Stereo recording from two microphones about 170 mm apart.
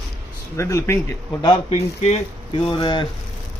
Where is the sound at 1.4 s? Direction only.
30° left (ahead or behind).